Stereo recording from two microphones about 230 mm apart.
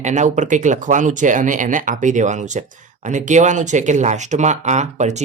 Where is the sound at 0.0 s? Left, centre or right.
Right.